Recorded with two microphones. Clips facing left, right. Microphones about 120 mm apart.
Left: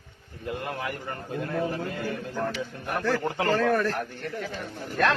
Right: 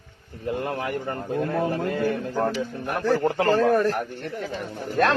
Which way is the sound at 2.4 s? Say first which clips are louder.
Right 5 dB; 35° right (ahead or behind).